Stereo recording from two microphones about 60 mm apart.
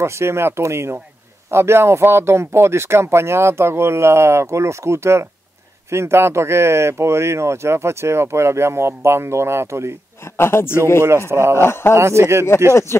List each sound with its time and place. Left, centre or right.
0.0 s speech: right
10.3 s a man's voice: left
11.1 s speech: right
11.5 s a man's voice: left
11.9 s speech: right